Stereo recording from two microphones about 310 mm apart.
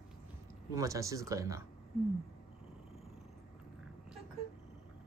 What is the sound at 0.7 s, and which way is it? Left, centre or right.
Speech, centre.